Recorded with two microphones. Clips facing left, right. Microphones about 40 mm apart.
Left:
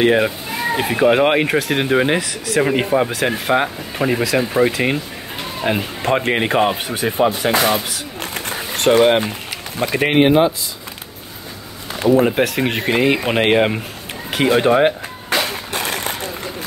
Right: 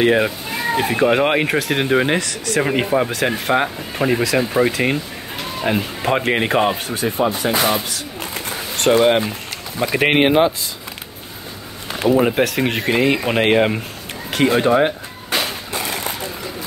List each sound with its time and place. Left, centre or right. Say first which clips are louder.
0.0 s speech: left 1 dB; centre
7.2 s speech: left 3 dB; left
8.2 s a sound: left 2 dB; left
9.0 s speech: left 1 dB; centre
10.0 s speech: left 1 dB; right
12.0 s speech: left 1 dB; centre
15.7 s vehicle: left 2 dB; left